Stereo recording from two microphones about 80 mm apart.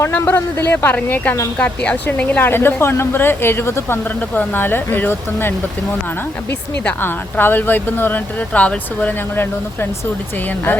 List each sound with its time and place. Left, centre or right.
0.0 s a woman's voice: left
6.8 s a woman's voice: left